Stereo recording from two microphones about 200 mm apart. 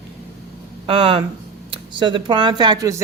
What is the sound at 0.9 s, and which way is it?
Speech, 25° right (ahead or behind).